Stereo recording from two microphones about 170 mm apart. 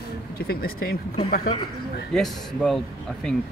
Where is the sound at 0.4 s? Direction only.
65° left (ahead or behind).